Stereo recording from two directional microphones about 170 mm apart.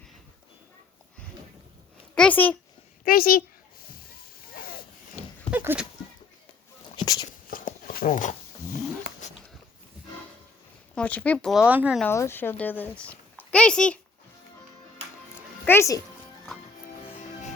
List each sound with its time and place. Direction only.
2.1 s speech: 10° left (ahead or behind)
3.0 s a woman's voice: 60° left (ahead or behind)
4.5 s a sound: 60° left (ahead or behind)
5.5 s a sound: 10° right (ahead or behind)
6.9 s a sound: 20° left (ahead or behind)
7.3 s horse: 55° left (ahead or behind)
10.9 s speech: 5° left (ahead or behind)
12.0 s a child's voice: 15° left (ahead or behind)
15.6 s speech: 15° left (ahead or behind)